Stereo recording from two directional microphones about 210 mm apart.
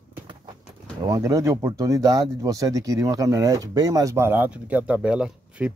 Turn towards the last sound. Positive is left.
turn(degrees=-5)  # may be behind; listen again after turning